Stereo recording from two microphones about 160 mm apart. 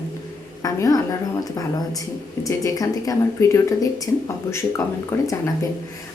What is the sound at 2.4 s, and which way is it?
A woman's voice, 20° left (ahead or behind).